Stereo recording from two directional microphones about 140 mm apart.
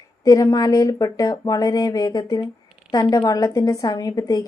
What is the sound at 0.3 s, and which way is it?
Speech, 25° left (ahead or behind).